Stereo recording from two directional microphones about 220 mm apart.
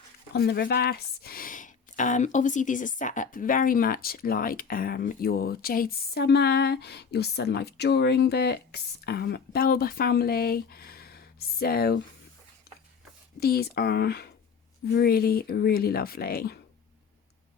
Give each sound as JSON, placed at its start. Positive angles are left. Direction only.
{"t": 0.3, "sound": "speech", "side_deg": 45}
{"t": 13.4, "sound": "speech", "side_deg": 45}